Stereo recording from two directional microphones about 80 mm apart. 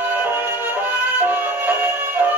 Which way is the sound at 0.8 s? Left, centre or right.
Right.